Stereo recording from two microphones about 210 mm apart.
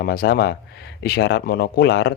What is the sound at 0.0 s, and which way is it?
Speech, 45° left (ahead or behind).